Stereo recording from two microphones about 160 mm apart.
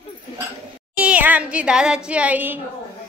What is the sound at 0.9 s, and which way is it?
A woman's voice, 5° right (ahead or behind).